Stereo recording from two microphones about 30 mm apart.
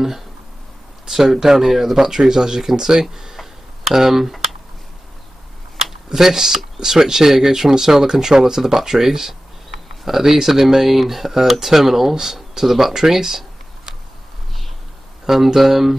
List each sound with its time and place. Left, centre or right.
1.0 s speech: centre
3.3 s tick: centre
6.0 s speech: centre
15.2 s speech: centre